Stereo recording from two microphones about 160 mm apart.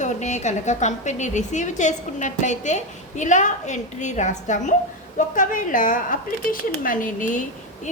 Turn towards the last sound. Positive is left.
turn(degrees=55)  # may be behind; listen again after turning